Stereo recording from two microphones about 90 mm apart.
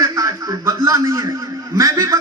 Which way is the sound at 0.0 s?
40° right (ahead or behind).